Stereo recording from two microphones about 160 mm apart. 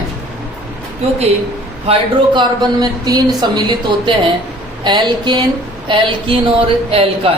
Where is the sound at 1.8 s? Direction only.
30° right (ahead or behind).